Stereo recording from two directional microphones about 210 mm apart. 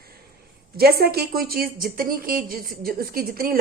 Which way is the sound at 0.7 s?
50° right (ahead or behind).